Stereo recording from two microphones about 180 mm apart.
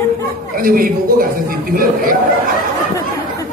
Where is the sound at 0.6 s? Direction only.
50° right (ahead or behind).